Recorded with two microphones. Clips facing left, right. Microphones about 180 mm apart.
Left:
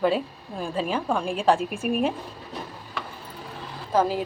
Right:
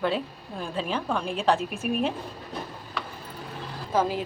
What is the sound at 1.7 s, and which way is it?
Speech, 55° left (ahead or behind).